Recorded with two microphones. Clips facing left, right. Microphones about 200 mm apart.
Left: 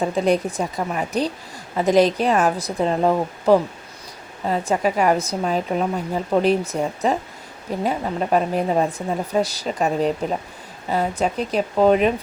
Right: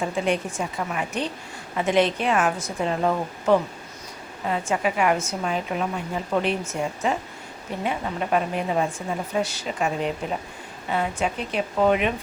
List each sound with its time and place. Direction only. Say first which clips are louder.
0.0 s a woman's voice: left 5 dB; 40° left (ahead or behind)